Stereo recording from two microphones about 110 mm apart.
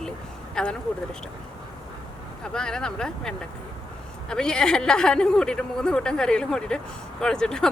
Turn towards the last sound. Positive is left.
turn(degrees=5)  # may be behind; listen again after turning